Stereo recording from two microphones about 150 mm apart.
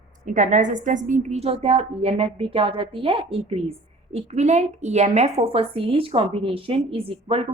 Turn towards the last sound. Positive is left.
turn(degrees=-40)  # may be behind; listen again after turning